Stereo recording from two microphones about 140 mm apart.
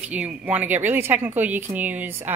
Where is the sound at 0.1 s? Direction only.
10° right (ahead or behind).